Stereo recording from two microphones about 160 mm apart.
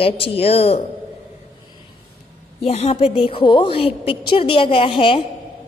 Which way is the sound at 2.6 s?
40° left (ahead or behind).